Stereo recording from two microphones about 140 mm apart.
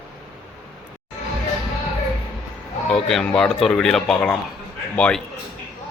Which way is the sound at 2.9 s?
Centre (ahead or behind).